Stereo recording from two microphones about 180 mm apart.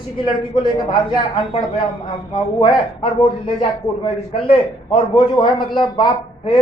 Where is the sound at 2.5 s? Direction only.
25° left (ahead or behind).